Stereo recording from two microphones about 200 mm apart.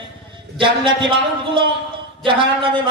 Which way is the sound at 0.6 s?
25° right (ahead or behind).